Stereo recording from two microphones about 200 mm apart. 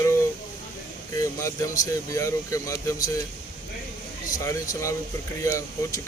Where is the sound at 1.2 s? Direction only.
15° left (ahead or behind).